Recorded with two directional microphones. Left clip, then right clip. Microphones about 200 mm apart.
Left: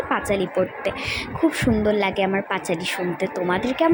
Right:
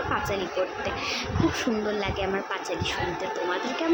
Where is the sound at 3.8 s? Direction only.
25° left (ahead or behind).